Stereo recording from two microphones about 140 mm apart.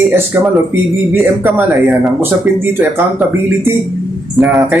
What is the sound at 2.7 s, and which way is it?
Speech, 15° right (ahead or behind).